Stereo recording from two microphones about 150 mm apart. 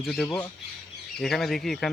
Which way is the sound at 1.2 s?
Centre (ahead or behind).